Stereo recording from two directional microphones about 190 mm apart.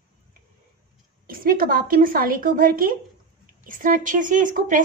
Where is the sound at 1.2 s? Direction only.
50° right (ahead or behind).